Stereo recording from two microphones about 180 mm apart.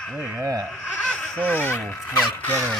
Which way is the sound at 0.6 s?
Centre (ahead or behind).